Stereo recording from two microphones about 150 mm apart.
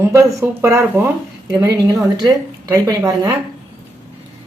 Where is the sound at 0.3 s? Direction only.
20° right (ahead or behind).